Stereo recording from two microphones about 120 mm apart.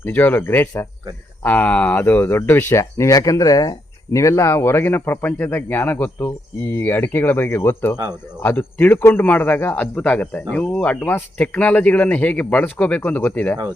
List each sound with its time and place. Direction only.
0.0 s speech: 15° left (ahead or behind)